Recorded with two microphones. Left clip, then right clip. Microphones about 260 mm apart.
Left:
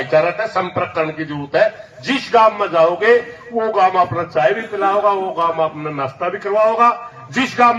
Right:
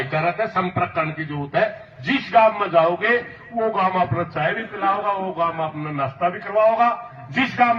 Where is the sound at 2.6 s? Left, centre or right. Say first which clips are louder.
Left 3 dB; centre.